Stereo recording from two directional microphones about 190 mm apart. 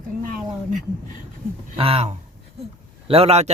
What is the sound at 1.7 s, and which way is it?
Speech, 30° right (ahead or behind).